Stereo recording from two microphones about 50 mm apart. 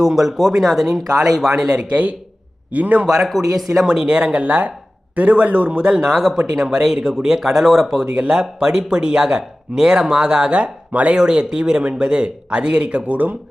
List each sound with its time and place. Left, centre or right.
0.0 s a man's voice: centre; by 3.1 s right
3.2 s speech: centre
3.8 s speech: centre
8.0 s speech: centre